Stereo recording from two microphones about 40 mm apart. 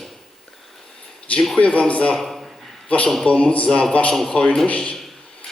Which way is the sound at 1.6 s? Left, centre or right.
Left.